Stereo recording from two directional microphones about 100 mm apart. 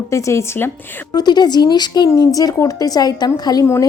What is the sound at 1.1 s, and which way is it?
A woman's voice, 45° left (ahead or behind).